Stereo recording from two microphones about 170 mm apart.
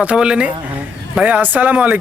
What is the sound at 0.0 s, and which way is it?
Speech, 5° right (ahead or behind).